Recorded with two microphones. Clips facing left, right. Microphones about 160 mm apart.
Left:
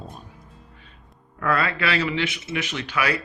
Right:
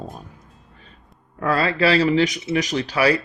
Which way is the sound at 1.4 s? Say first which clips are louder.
Right 4 dB; 30° right (ahead or behind).